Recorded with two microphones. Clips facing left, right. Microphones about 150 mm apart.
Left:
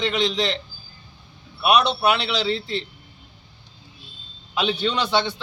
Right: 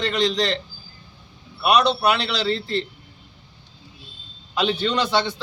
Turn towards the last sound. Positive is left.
turn(degrees=0)  # may be behind; listen again after turning